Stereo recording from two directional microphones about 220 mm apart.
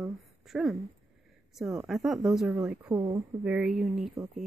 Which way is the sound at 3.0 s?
20° right (ahead or behind).